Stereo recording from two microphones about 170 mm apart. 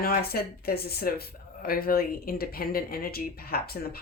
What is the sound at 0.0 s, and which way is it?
Speech, 65° left (ahead or behind).